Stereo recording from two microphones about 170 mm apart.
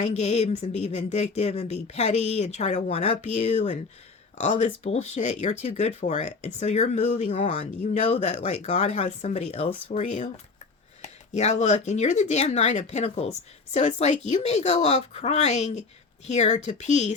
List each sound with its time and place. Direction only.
0.0 s speech: 40° left (ahead or behind)